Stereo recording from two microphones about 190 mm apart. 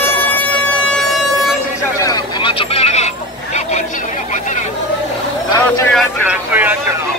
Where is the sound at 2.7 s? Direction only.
35° left (ahead or behind).